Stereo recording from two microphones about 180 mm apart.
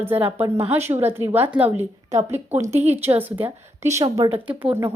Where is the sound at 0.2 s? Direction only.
30° right (ahead or behind).